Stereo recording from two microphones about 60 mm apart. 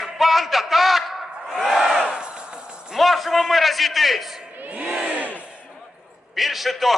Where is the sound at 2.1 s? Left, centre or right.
Centre.